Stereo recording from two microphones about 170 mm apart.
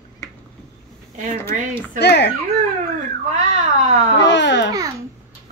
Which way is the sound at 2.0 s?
80° left.